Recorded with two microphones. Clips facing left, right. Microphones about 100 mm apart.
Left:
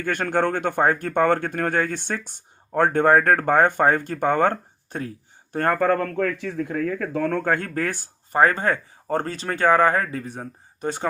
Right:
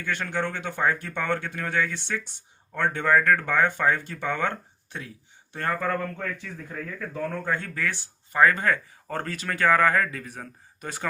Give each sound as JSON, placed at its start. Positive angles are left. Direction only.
{"t": 0.0, "sound": "speech", "side_deg": 50}